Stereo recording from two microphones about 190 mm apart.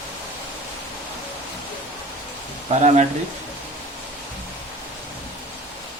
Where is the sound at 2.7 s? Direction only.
40° right (ahead or behind).